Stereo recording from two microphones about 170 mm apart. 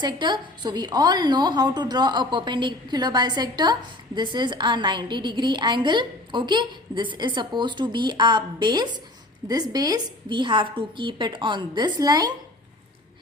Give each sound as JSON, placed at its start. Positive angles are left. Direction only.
{"t": 0.0, "sound": "a woman's voice", "side_deg": -25}